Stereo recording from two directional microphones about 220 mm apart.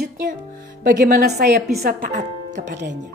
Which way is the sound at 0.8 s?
35° right (ahead or behind).